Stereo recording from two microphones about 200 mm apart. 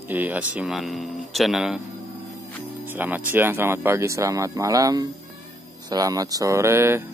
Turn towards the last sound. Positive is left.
turn(degrees=-10)  # may be behind; listen again after turning